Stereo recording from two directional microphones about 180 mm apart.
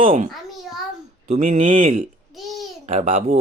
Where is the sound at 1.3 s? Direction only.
40° right (ahead or behind).